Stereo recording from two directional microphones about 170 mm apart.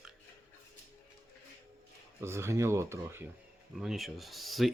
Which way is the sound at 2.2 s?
15° right (ahead or behind).